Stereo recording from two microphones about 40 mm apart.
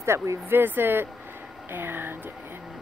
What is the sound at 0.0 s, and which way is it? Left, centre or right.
Speech, right.